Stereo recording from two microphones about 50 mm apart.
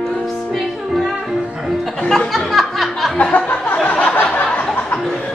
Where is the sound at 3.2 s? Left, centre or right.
Left.